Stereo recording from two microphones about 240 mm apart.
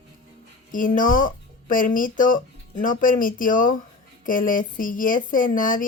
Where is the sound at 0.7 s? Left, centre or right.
Left.